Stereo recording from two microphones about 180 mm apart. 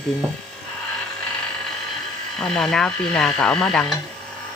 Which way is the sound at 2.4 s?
5° left (ahead or behind).